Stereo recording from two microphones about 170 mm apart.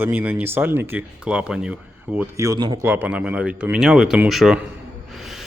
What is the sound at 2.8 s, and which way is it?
Speech, 10° right (ahead or behind).